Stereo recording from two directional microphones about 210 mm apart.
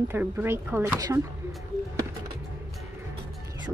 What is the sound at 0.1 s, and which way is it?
Speech, 10° right (ahead or behind).